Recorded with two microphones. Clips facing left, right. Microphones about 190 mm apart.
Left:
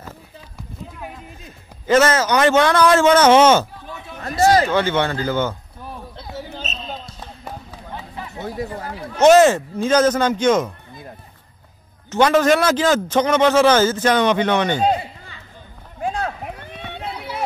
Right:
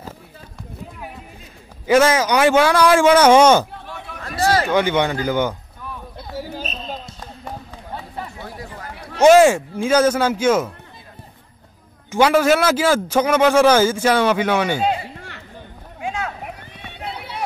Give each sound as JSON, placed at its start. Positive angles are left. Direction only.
{"t": 1.9, "sound": "a man's voice", "side_deg": -10}
{"t": 4.6, "sound": "a man's voice", "side_deg": -15}
{"t": 5.8, "sound": "a sound", "side_deg": 35}
{"t": 6.5, "sound": "basketball bounce", "side_deg": -10}
{"t": 8.4, "sound": "chatter", "side_deg": 25}
{"t": 9.2, "sound": "a man's voice", "side_deg": -10}
{"t": 12.1, "sound": "a man's voice", "side_deg": -10}
{"t": 15.1, "sound": "a sound", "side_deg": -80}
{"t": 16.0, "sound": "a sound", "side_deg": 35}